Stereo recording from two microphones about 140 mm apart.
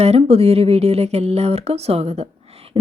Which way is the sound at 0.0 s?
50° right (ahead or behind).